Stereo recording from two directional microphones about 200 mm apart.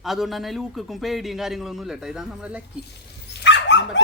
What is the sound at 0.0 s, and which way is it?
Speech, centre (ahead or behind).